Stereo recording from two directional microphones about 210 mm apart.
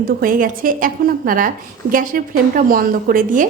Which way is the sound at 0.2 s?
40° right (ahead or behind).